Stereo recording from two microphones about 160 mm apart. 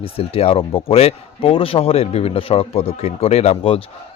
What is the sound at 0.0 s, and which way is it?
Speech, 35° left (ahead or behind).